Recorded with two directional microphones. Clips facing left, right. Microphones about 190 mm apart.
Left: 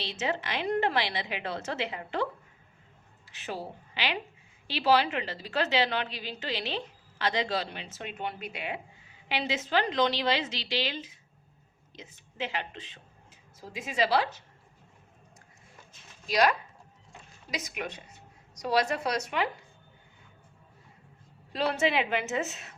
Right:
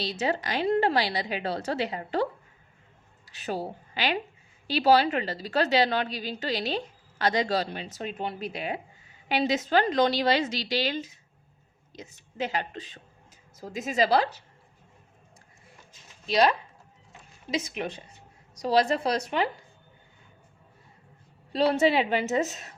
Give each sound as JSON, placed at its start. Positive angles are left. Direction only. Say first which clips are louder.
{"t": 0.0, "sound": "a woman's voice", "louder": "right 4 dB", "side_deg": -40}
{"t": 3.2, "sound": "a woman's voice", "louder": "right 5 dB", "side_deg": -40}
{"t": 16.2, "sound": "a woman's voice", "louder": "right 3 dB", "side_deg": -30}
{"t": 21.5, "sound": "a woman's voice", "louder": "right 5 dB", "side_deg": -35}